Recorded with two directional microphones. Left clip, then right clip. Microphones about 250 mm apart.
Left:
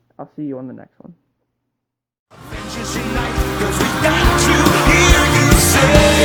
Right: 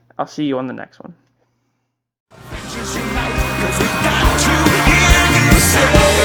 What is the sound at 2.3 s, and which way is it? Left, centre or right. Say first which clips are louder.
Music: even; centre.